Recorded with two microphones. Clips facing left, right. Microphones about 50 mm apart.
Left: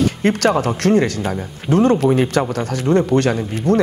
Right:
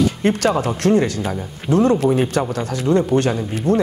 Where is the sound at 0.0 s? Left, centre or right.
Left.